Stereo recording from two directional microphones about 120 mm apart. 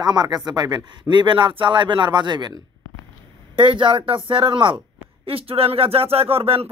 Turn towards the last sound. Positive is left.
turn(degrees=-55)  # may be behind; listen again after turning